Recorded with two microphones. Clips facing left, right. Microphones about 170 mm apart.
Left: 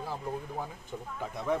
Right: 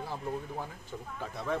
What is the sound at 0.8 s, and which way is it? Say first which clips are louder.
Speech: left 2 dB; 15° left (ahead or behind).